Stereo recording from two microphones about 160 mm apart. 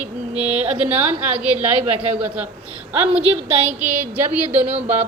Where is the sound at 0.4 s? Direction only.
40° right (ahead or behind).